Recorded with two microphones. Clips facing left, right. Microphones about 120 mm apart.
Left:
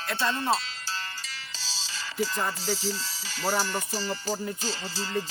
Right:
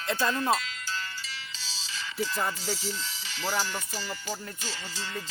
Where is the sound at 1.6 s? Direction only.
35° left (ahead or behind).